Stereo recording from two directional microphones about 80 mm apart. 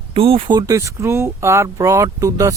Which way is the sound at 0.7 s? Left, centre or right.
Right.